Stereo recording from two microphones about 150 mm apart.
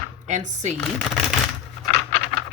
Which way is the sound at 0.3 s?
50° right (ahead or behind).